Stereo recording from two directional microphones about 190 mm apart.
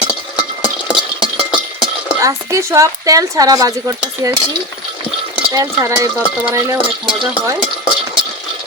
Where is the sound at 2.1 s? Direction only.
15° right (ahead or behind).